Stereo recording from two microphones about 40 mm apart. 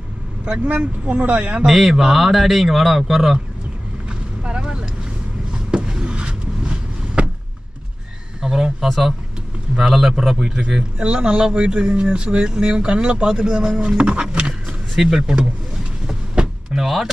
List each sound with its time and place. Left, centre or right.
0.5 s speech: right
1.7 s speech: centre
4.4 s vehicle: right
5.8 s vehicle: right
8.4 s a sound: centre
8.8 s speech: centre; by 14.2 s right
15.0 s speech: centre
16.4 s vehicle: right
16.7 s speech: centre